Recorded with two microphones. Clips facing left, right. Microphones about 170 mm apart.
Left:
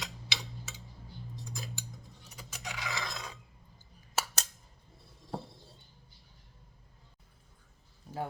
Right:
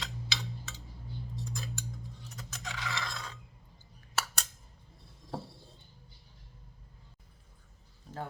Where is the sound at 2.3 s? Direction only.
10° left (ahead or behind).